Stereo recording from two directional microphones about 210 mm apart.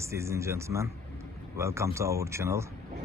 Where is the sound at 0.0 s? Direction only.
15° right (ahead or behind).